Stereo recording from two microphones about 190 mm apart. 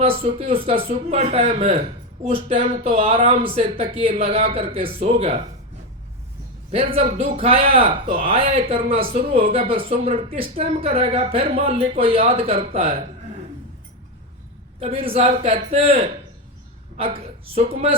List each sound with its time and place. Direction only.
0.0 s speech: 30° right (ahead or behind)
6.7 s speech: 30° right (ahead or behind)
14.8 s speech: 30° right (ahead or behind)